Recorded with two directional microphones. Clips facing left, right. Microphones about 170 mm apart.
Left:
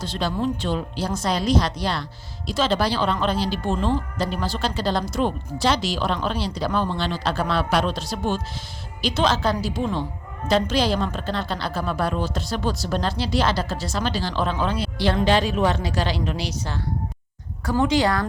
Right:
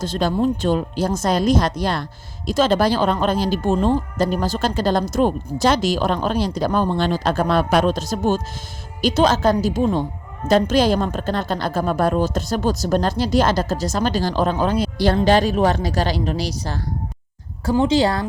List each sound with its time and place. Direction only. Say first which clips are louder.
0.0 s a woman's voice: right 5 dB; 45° right (ahead or behind)
17.7 s a woman's voice: right 3 dB; 25° right (ahead or behind)